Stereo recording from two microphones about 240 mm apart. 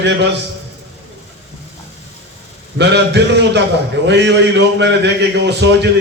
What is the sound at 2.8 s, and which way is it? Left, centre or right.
A man's voice, right.